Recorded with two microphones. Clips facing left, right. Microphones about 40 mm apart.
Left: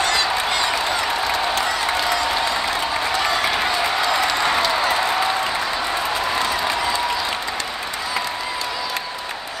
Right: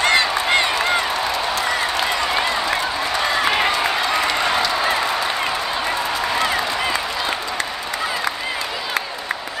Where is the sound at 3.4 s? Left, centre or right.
Right.